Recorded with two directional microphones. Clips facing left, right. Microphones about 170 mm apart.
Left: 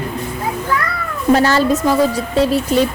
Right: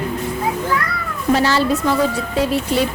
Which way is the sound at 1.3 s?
50° left (ahead or behind).